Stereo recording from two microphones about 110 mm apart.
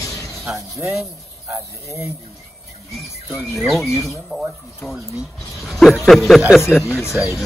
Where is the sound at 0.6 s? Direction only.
25° right (ahead or behind).